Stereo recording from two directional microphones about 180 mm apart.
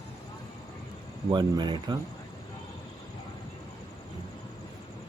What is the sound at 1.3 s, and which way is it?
Speech, 25° right (ahead or behind).